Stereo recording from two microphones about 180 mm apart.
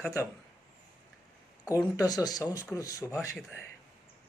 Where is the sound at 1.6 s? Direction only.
20° left (ahead or behind).